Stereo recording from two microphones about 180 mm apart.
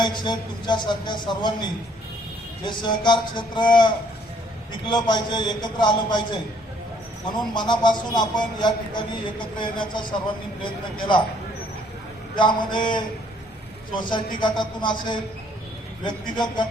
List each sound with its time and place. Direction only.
0.0 s a man's voice: 25° left (ahead or behind)
12.4 s a man's voice: 25° left (ahead or behind)